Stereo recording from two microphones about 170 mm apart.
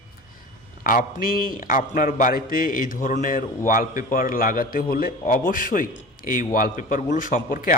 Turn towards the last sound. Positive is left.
turn(degrees=55)  # may be behind; listen again after turning